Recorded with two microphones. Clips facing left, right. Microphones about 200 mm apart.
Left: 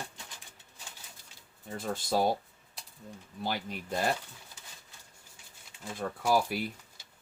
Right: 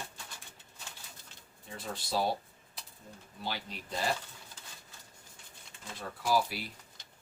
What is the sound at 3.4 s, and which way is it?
Speech, 50° left (ahead or behind).